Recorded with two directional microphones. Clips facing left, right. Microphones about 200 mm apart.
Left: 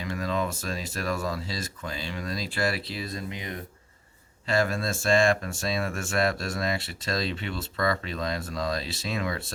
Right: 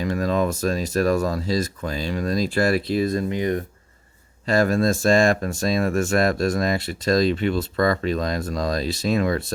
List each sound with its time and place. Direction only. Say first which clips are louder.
0.0 s speech: right 7 dB; 45° right (ahead or behind)